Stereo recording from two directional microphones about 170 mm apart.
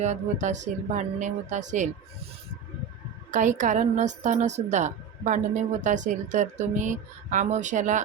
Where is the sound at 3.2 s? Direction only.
45° right (ahead or behind).